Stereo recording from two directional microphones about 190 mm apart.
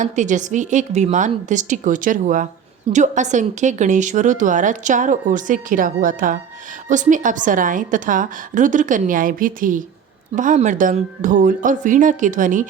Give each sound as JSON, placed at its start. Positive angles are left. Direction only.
{"t": 0.0, "sound": "a woman's voice", "side_deg": -40}